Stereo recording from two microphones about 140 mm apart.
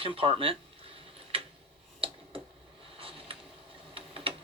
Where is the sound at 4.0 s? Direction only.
40° right (ahead or behind).